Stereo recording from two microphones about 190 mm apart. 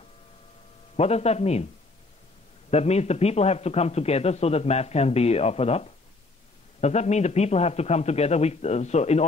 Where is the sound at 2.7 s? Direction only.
35° left (ahead or behind).